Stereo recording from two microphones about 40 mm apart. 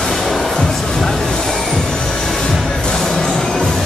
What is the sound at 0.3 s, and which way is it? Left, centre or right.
Music, centre.